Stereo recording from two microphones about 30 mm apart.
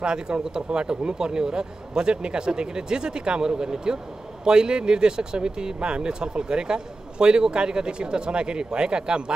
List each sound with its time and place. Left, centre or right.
0.0 s speech: right